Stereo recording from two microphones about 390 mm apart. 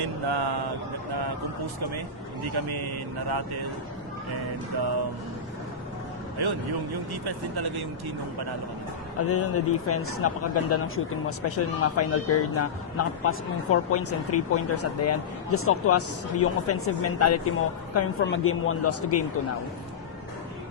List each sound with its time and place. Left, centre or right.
0.0 s speech: right
2.6 s speech: right
6.4 s speech: right
9.2 s speech: left